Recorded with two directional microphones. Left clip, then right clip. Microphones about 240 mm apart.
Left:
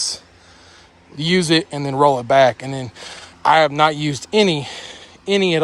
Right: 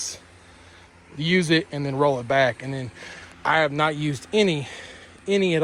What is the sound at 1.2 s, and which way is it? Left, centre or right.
Speech, centre.